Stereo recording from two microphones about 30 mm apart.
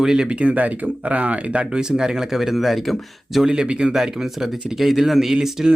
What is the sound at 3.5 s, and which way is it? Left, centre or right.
Speech, right.